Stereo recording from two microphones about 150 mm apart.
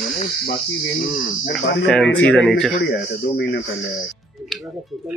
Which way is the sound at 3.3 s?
90° left.